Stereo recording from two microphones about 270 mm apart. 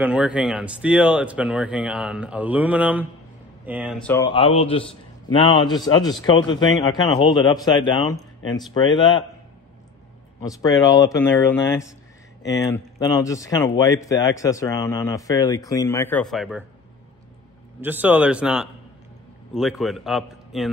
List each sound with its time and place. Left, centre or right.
0.0 s speech: centre
4.0 s speech: centre
10.4 s speech: centre
17.7 s speech: centre